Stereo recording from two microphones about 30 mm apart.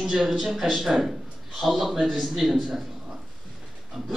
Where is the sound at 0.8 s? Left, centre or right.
Centre.